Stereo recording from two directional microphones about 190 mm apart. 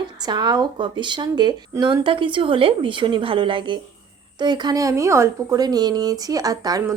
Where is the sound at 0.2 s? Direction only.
20° right (ahead or behind).